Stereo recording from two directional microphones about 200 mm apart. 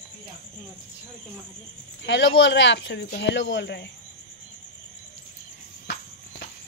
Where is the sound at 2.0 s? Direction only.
65° left (ahead or behind).